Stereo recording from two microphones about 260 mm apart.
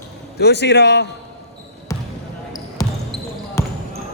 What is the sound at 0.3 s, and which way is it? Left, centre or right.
Speech, left.